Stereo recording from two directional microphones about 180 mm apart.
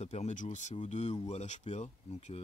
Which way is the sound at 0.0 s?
35° left (ahead or behind).